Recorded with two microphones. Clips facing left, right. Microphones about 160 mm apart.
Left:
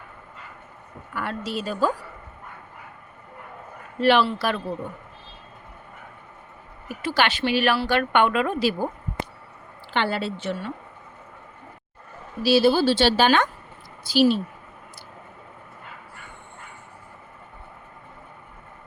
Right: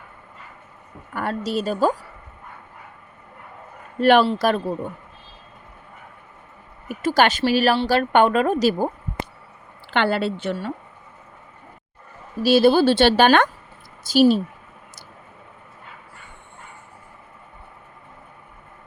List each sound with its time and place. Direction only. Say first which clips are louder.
1.1 s speech: right 5 dB; 40° right (ahead or behind)
4.0 s a woman's voice: right 4 dB; 50° right (ahead or behind)
6.8 s a woman's voice: right 5 dB; 45° right (ahead or behind)
9.9 s a woman's voice: right 4 dB; 60° right (ahead or behind)
12.4 s a woman's voice: right 3 dB; 50° right (ahead or behind)
14.0 s a woman's voice: right 3 dB; 45° right (ahead or behind)